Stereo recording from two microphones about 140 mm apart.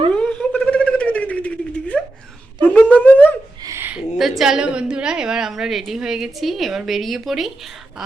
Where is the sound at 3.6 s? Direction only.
15° right (ahead or behind).